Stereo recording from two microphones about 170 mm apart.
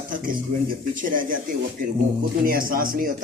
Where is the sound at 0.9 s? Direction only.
55° right (ahead or behind).